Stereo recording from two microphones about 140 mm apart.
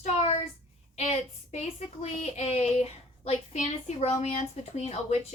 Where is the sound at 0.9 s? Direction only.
50° left (ahead or behind).